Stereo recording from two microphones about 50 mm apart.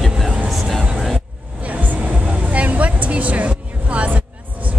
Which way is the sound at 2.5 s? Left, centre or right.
Right.